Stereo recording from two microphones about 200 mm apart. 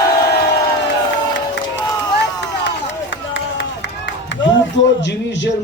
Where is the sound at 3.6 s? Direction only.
65° left (ahead or behind).